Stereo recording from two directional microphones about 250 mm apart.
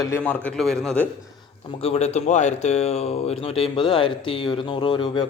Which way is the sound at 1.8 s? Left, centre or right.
Left.